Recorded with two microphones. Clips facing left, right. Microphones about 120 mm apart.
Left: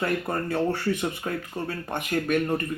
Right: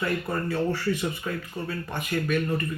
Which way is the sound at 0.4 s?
60° left (ahead or behind).